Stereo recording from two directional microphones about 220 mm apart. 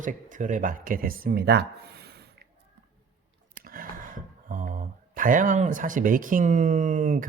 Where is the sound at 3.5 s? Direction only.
40° right (ahead or behind).